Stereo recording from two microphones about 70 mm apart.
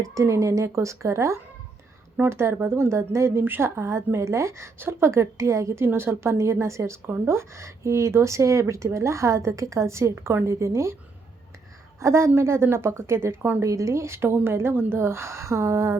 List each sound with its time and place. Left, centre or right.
0.0 s a woman's voice: right
5.8 s a woman's voice: right
11.9 s a woman's voice: right
13.6 s a woman's voice: right